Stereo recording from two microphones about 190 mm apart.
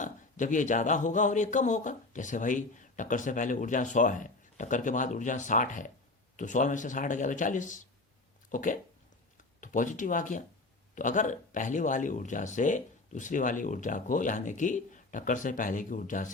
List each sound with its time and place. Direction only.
0.0 s speech: 40° left (ahead or behind)